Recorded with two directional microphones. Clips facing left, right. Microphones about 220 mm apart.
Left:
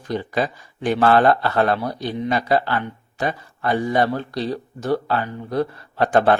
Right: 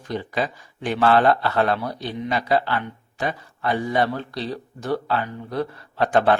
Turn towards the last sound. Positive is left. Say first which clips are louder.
# left 2 dB
turn(degrees=45)  # may be behind; listen again after turning